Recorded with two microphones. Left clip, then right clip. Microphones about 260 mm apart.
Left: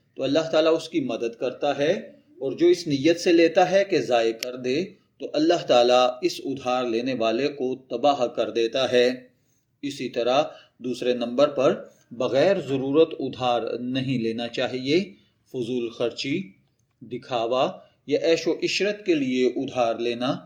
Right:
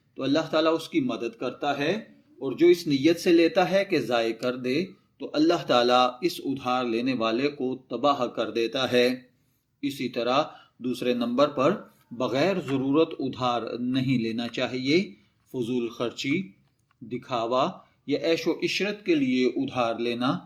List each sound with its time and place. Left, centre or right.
0.2 s speech: right